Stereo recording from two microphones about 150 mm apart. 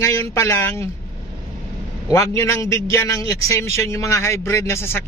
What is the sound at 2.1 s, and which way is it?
A man's voice, 20° left (ahead or behind).